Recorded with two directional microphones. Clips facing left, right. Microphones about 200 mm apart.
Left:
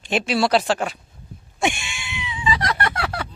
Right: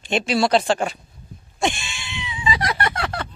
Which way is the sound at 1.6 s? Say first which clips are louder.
Even; 10° left (ahead or behind).